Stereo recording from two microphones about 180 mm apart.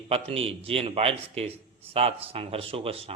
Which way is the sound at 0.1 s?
30° right (ahead or behind).